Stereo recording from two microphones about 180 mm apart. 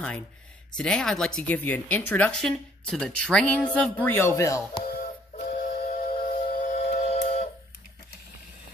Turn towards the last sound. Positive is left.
turn(degrees=35)  # may be behind; listen again after turning